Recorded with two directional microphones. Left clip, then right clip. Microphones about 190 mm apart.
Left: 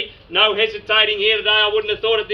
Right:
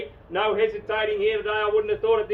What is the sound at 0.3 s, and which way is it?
A man's voice, 20° right (ahead or behind).